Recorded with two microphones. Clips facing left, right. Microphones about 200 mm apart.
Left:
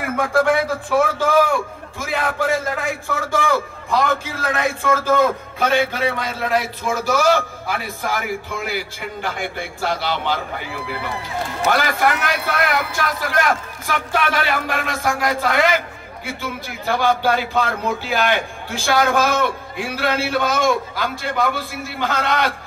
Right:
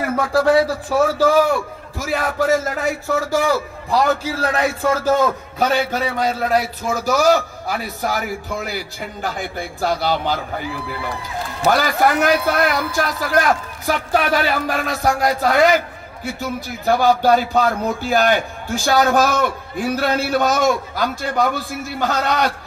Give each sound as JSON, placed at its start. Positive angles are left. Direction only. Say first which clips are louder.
{"t": 0.1, "sound": "a man's voice", "louder": "right 2 dB", "side_deg": -35}